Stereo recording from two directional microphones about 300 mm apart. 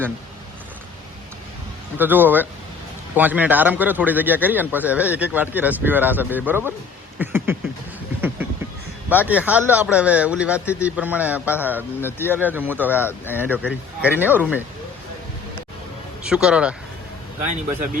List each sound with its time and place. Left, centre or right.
2.0 s a man's voice: centre
9.0 s a man's voice: centre
11.9 s speech: centre
12.4 s speech: centre
12.9 s speech: centre
13.6 s a man's voice: centre
16.2 s a man's voice: centre
17.4 s speech: right